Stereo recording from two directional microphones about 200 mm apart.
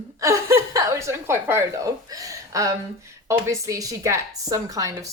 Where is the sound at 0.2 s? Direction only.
15° right (ahead or behind).